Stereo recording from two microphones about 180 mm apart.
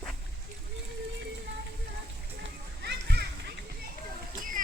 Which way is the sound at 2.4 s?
70° right (ahead or behind).